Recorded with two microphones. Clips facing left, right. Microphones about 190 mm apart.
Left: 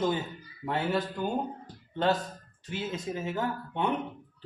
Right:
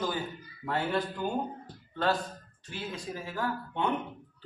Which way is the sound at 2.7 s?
20° left (ahead or behind).